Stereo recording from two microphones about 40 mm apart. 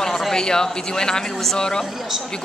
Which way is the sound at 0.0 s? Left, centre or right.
Centre.